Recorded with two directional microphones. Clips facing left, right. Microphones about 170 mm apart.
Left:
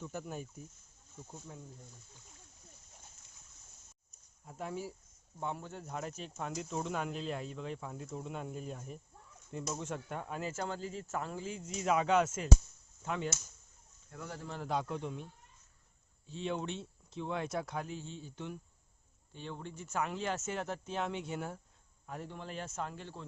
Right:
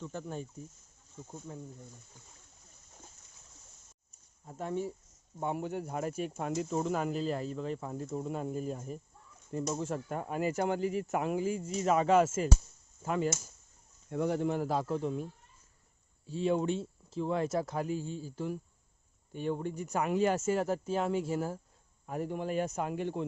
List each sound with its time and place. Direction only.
0.0 s speech: 10° left (ahead or behind)
1.5 s speech: centre (ahead or behind)
4.4 s speech: centre (ahead or behind)
5.4 s speech: 15° right (ahead or behind)
14.1 s speech: 25° right (ahead or behind)
14.7 s speech: 5° right (ahead or behind)
17.9 s a man's voice: 40° right (ahead or behind)
18.2 s speech: 5° right (ahead or behind)